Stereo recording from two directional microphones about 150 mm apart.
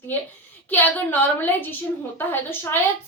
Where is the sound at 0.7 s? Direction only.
10° left (ahead or behind).